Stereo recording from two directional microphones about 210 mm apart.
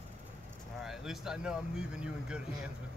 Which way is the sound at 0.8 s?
Centre (ahead or behind).